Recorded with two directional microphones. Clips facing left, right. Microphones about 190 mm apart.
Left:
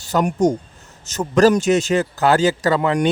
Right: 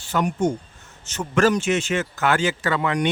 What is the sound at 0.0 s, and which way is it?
Speech, 40° left (ahead or behind).